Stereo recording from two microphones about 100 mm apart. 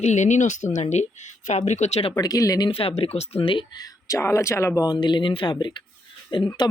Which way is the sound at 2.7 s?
75° left (ahead or behind).